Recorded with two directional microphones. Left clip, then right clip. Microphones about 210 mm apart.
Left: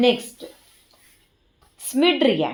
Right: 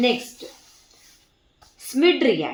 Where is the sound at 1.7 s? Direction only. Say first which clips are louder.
Even; 35° left (ahead or behind).